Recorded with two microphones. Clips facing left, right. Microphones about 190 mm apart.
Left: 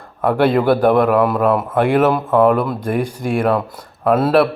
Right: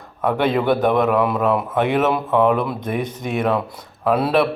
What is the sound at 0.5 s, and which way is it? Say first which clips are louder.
A man's voice: left 3 dB; 5° left (ahead or behind).